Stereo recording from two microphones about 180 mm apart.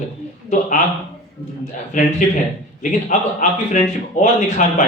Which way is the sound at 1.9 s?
45° left (ahead or behind).